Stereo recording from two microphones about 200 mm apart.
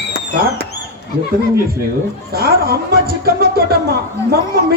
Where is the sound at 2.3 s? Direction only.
50° right (ahead or behind).